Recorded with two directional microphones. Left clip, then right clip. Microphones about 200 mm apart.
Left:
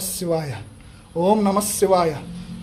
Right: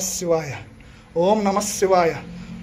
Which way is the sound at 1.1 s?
25° left (ahead or behind).